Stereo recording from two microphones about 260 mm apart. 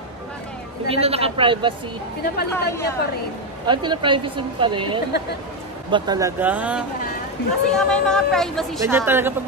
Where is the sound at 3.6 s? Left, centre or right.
Centre.